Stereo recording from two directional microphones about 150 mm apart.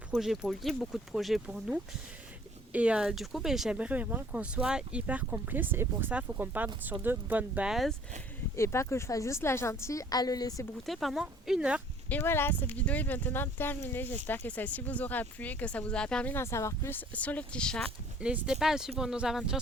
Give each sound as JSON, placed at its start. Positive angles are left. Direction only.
{"t": 0.1, "sound": "speech", "side_deg": 0}
{"t": 8.5, "sound": "a woman's voice", "side_deg": 20}
{"t": 10.8, "sound": "speech", "side_deg": 0}
{"t": 12.0, "sound": "speech", "side_deg": 15}
{"t": 18.2, "sound": "speech", "side_deg": -5}